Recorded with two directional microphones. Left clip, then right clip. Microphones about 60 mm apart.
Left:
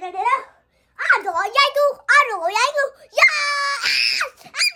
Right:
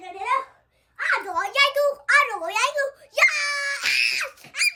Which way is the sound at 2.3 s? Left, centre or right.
Left.